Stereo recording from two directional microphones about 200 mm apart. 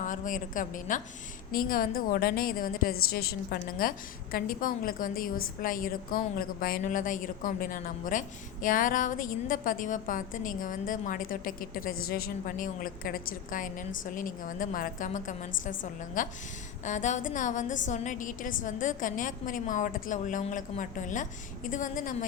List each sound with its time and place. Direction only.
0.0 s a woman's voice: 40° left (ahead or behind)